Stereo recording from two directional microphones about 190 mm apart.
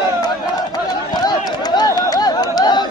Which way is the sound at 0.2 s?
20° left (ahead or behind).